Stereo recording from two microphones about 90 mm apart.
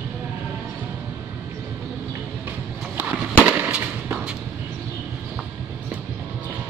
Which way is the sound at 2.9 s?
15° right (ahead or behind).